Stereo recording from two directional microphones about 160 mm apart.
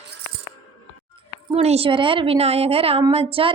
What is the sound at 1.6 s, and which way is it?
A woman's voice, 40° right (ahead or behind).